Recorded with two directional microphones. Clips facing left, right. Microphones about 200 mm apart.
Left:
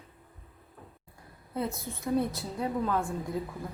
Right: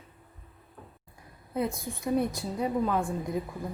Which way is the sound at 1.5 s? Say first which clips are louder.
Right 3 dB; 15° right (ahead or behind).